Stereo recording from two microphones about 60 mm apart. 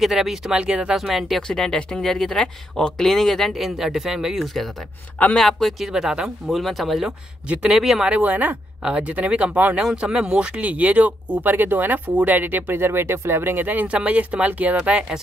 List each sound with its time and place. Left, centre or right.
0.0 s speech: centre
0.9 s speech: centre
1.5 s speech: centre
5.4 s speech: centre
5.9 s speech: centre
7.4 s speech: right
7.7 s speech: centre
8.1 s speech: right
13.8 s speech: centre